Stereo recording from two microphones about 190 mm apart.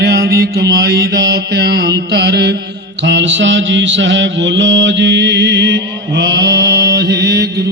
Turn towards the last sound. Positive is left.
turn(degrees=-60)  # may be behind; listen again after turning